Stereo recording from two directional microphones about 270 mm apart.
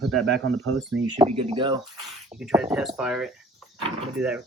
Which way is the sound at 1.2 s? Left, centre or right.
Right.